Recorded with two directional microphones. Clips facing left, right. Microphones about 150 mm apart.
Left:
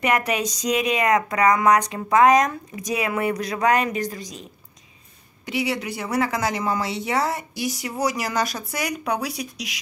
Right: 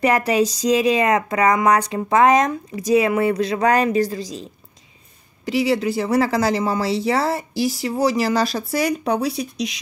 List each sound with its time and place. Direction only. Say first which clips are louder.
0.0 s speech: right 5 dB; 30° right (ahead or behind)